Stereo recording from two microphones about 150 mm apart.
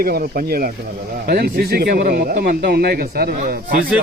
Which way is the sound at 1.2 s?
90° right.